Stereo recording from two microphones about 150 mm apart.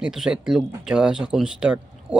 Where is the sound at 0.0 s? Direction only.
5° right (ahead or behind).